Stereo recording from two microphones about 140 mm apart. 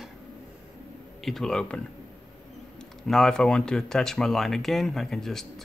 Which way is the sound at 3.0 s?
5° left (ahead or behind).